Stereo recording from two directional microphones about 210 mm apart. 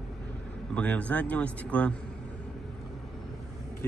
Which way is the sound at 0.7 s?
5° left (ahead or behind).